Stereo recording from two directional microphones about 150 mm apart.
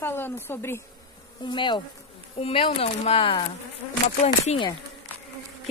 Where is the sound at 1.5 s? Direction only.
30° left (ahead or behind).